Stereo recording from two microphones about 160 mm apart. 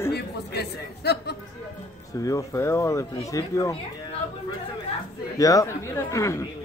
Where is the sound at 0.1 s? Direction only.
90° left.